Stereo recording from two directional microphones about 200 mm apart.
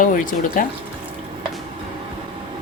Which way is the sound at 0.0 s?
45° left (ahead or behind).